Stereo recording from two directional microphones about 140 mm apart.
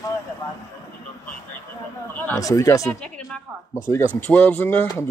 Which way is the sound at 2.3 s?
25° left (ahead or behind).